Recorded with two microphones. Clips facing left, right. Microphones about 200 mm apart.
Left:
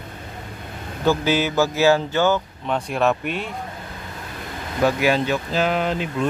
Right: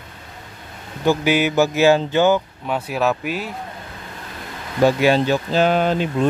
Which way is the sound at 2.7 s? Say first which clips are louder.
Even; 5° right (ahead or behind).